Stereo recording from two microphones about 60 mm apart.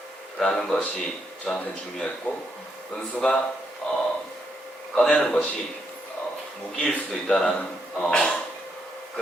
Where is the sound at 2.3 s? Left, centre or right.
Left.